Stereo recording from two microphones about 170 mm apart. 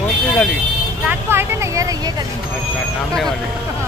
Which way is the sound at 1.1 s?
15° right (ahead or behind).